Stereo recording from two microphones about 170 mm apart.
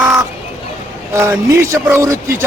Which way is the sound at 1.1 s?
15° right (ahead or behind).